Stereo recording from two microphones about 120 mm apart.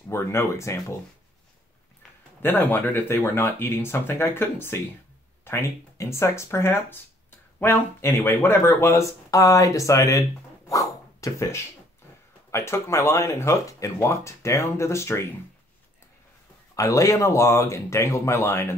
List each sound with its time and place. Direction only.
0.1 s speech: 20° left (ahead or behind)
2.4 s speech: 15° left (ahead or behind)
10.7 s dog: 30° left (ahead or behind)
12.4 s speech: 25° left (ahead or behind)
16.7 s speech: 30° left (ahead or behind)